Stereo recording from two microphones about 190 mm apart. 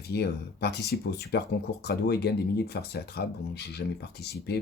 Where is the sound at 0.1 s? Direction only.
60° left (ahead or behind).